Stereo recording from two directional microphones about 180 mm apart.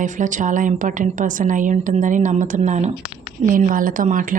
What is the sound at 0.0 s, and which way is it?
A woman's voice, 45° right (ahead or behind).